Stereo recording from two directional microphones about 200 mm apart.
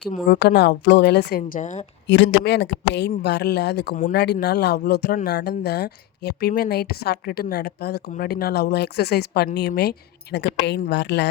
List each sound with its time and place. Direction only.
0.3 s speech: 55° left (ahead or behind); by 1.9 s 35° left (ahead or behind)
2.0 s speech: 65° left (ahead or behind)
3.9 s speech: 45° left (ahead or behind)